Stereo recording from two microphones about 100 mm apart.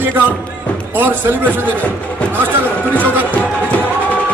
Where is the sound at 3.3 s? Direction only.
15° left (ahead or behind).